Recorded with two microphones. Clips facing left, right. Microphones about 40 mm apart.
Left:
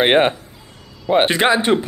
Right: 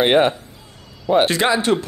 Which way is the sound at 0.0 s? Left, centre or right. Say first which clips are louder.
Left 1 dB; left.